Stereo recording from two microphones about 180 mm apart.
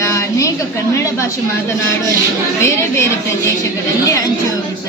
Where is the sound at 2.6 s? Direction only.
15° left (ahead or behind).